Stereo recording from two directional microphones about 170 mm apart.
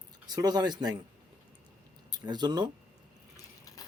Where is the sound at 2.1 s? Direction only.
25° right (ahead or behind).